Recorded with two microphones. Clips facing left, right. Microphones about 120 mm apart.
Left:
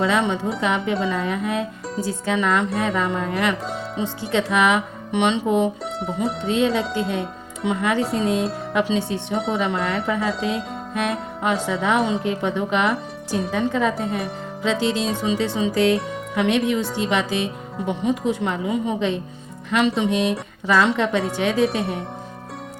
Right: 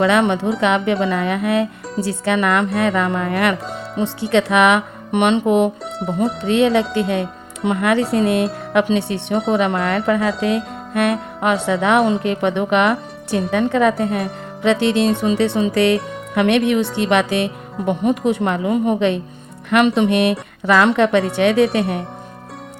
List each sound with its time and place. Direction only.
0.0 s speech: 65° right (ahead or behind)
5.8 s speech: centre (ahead or behind)
6.4 s speech: 70° right (ahead or behind)